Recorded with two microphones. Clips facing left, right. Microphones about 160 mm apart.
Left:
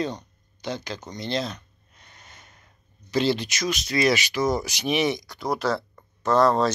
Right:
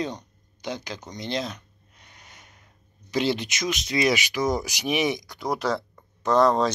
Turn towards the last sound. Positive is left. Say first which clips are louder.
# even
turn(degrees=-15)  # may be behind; listen again after turning